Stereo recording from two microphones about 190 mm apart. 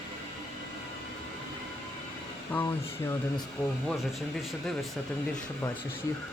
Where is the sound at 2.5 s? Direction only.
15° left (ahead or behind).